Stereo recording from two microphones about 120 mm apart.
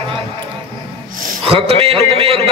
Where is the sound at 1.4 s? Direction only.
55° right (ahead or behind).